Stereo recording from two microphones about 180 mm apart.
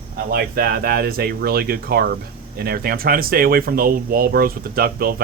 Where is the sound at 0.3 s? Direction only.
55° right (ahead or behind).